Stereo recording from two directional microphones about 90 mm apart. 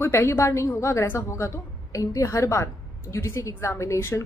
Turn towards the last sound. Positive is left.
turn(degrees=30)  # may be behind; listen again after turning